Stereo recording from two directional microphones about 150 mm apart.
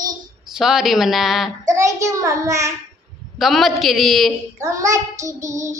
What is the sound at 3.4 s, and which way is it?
Speech, centre (ahead or behind).